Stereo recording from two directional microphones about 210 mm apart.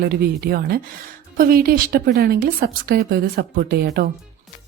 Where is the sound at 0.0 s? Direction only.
45° right (ahead or behind).